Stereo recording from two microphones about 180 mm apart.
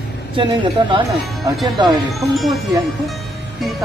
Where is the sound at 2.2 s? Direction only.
Centre (ahead or behind).